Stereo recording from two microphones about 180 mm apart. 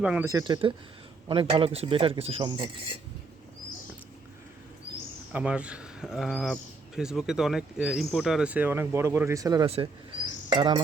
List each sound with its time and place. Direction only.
0.0 s speech: 5° right (ahead or behind)
0.3 s speech: 20° right (ahead or behind)
5.3 s speech: 5° right (ahead or behind)
9.6 s speech: 35° right (ahead or behind)
10.5 s cricket: 25° right (ahead or behind)